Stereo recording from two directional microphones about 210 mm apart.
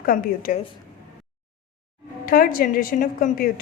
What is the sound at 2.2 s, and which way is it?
A woman's voice, 45° left (ahead or behind).